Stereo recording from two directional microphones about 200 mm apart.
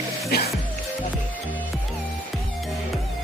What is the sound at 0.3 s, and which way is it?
Music, 50° left (ahead or behind).